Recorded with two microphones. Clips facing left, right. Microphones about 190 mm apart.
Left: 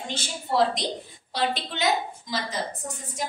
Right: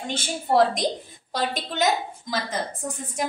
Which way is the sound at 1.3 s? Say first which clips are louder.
Right 1 dB; 45° right (ahead or behind).